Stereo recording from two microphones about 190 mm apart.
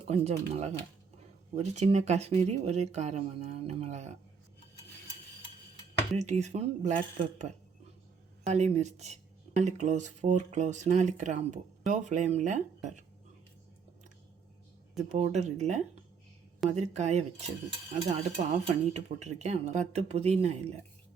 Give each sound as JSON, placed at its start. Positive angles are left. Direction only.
{"t": 0.0, "sound": "speech", "side_deg": -30}
{"t": 6.1, "sound": "speech", "side_deg": -35}
{"t": 14.9, "sound": "speech", "side_deg": -35}